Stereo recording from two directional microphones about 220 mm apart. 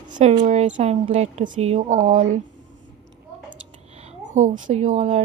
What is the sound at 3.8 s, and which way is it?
Speech, 30° right (ahead or behind).